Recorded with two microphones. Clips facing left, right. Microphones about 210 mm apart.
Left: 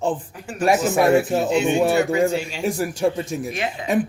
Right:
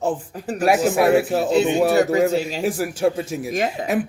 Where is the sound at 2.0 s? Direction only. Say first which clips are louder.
Right 2 dB; 40° right (ahead or behind).